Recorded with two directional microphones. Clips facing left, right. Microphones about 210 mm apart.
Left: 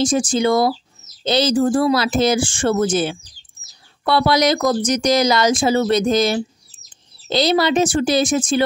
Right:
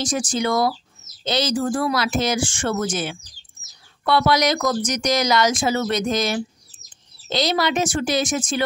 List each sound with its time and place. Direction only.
0.0 s speech: 25° left (ahead or behind)